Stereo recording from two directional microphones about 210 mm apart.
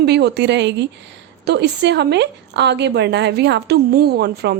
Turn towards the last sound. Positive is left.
turn(degrees=-50)  # may be behind; listen again after turning